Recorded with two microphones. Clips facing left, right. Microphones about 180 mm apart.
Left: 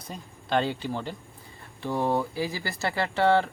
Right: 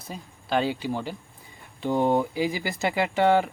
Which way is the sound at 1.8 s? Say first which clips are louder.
Right 4 dB; 20° right (ahead or behind).